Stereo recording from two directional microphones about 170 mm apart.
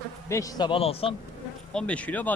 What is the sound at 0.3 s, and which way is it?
Speech, 20° left (ahead or behind).